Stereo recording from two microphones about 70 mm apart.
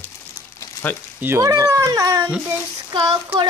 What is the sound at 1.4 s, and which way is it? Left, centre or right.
Speech, right.